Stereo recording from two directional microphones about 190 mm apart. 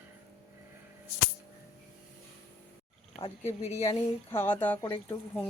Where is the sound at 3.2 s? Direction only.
20° left (ahead or behind).